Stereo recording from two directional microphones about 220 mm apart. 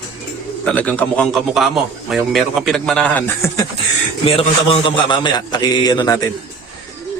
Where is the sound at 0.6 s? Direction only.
5° left (ahead or behind).